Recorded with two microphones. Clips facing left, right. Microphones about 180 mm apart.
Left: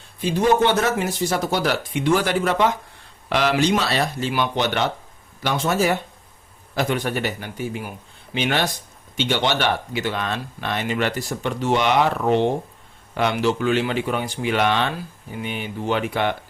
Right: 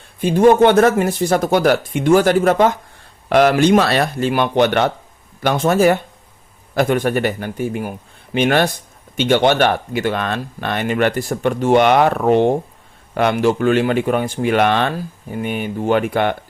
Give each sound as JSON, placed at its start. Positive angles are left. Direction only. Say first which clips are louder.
{"t": 0.2, "sound": "speech", "louder": "right 7 dB", "side_deg": -50}